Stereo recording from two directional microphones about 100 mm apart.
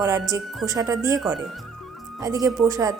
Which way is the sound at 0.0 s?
30° right (ahead or behind).